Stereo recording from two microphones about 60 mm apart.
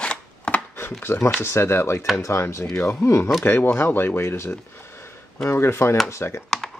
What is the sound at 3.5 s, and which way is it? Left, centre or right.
Speech, left.